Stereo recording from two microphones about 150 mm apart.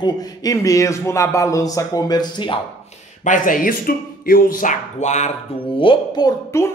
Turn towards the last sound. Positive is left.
turn(degrees=25)  # may be behind; listen again after turning